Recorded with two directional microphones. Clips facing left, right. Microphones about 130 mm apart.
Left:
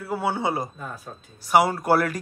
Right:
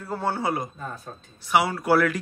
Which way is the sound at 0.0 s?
10° left (ahead or behind).